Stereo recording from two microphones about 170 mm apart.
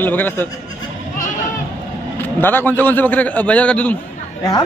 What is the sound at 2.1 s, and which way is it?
A man's voice, 10° left (ahead or behind).